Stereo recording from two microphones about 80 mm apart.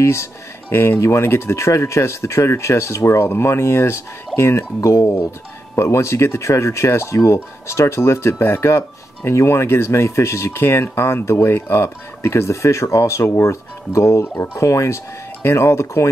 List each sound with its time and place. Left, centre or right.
0.0 s speech: left